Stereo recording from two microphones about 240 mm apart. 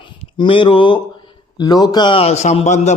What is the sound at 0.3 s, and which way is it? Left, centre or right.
A man's voice, left.